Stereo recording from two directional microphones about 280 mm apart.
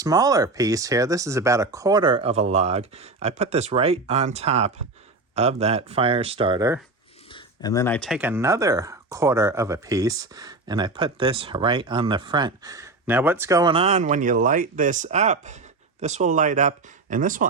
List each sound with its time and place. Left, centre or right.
0.0 s speech: centre
7.3 s speech: centre; by 17.5 s right